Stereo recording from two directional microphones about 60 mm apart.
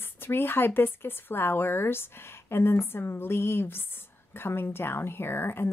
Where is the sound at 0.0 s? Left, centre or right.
Left.